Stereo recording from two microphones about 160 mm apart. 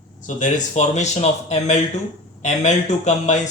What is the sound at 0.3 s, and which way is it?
A man's voice, 50° left (ahead or behind).